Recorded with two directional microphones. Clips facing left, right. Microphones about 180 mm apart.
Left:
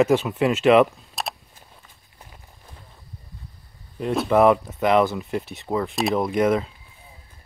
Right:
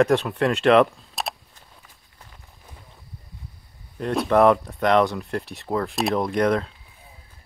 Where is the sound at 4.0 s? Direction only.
5° left (ahead or behind).